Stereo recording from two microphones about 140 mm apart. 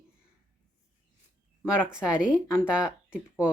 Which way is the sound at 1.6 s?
5° right (ahead or behind).